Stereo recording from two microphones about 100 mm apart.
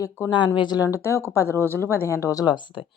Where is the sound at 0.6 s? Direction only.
45° left (ahead or behind).